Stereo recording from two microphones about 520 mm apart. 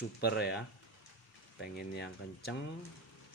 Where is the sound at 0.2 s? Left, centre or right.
Centre.